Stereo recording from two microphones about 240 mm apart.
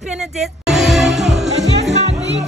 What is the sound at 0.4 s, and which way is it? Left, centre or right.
Music, centre.